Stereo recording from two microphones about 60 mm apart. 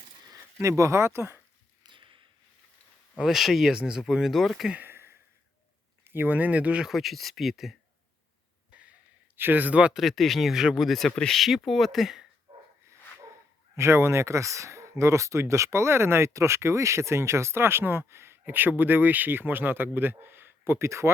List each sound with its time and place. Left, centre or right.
0.7 s speech: right
3.2 s speech: centre
4.9 s a sound: right
6.1 s speech: right
6.8 s speech: centre
8.7 s a sound: right
9.4 s speech: right
9.9 s speech: centre
11.1 s speech: centre
11.3 s speech: centre
13.7 s speech: right
20.7 s speech: right